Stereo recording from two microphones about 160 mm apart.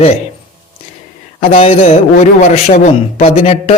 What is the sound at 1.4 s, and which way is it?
A man's voice, 40° left (ahead or behind).